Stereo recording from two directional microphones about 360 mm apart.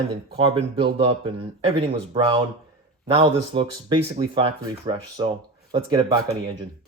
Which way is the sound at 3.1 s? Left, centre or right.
Centre.